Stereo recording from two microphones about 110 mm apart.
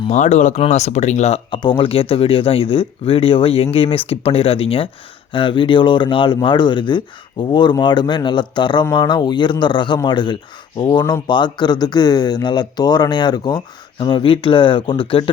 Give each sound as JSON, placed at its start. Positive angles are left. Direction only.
{"t": 0.1, "sound": "speech", "side_deg": 90}
{"t": 1.5, "sound": "speech", "side_deg": 45}